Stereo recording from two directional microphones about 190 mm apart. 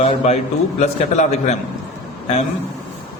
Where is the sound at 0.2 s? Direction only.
35° left (ahead or behind).